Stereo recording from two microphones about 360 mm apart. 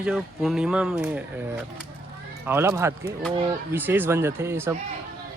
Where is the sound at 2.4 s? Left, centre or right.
Centre.